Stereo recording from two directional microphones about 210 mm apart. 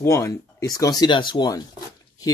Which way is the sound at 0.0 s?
15° left (ahead or behind).